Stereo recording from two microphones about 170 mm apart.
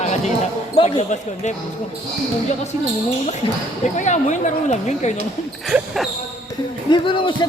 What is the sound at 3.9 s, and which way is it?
A woman's voice, 45° left (ahead or behind).